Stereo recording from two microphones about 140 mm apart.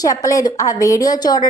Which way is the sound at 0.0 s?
25° left (ahead or behind).